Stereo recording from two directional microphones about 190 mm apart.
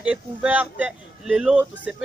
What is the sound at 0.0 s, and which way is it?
Speech, 5° right (ahead or behind).